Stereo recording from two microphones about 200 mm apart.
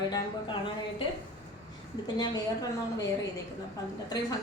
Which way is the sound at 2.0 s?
20° left (ahead or behind).